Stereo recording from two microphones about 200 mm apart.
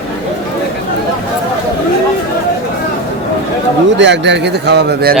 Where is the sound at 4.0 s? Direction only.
60° right (ahead or behind).